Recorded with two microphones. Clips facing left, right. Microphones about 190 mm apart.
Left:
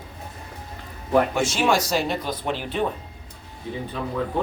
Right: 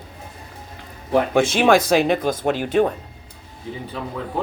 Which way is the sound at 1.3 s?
55° right (ahead or behind).